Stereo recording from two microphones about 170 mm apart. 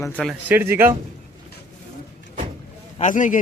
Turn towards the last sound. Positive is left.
turn(degrees=50)  # may be behind; listen again after turning